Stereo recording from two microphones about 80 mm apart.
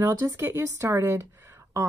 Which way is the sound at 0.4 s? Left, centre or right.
Right.